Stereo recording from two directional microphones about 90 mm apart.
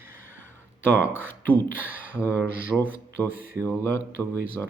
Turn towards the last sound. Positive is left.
turn(degrees=25)  # may be behind; listen again after turning